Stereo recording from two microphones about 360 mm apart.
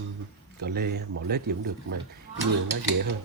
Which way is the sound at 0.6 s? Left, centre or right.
Right.